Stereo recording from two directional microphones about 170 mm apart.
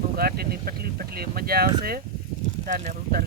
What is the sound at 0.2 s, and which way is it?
Speech, 65° right (ahead or behind).